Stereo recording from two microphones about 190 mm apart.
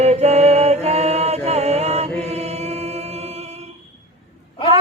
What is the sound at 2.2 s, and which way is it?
A capella, 35° right (ahead or behind).